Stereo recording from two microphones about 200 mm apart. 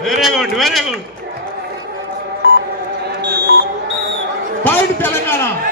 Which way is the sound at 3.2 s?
55° right (ahead or behind).